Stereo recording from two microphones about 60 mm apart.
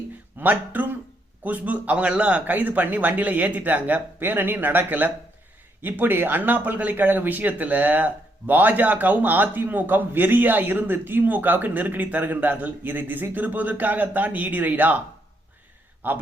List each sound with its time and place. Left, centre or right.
0.3 s speech: right
16.0 s speech: right